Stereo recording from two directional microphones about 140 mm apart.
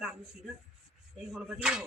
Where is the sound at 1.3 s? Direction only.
5° right (ahead or behind).